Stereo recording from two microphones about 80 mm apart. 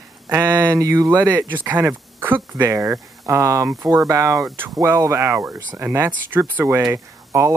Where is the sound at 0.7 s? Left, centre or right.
Right.